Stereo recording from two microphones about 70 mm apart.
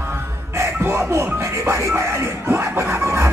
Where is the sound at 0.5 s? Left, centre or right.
Right.